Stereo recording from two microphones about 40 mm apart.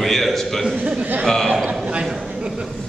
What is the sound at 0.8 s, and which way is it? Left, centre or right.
Speech, right.